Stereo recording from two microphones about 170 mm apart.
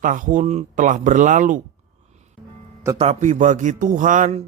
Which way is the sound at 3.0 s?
45° right (ahead or behind).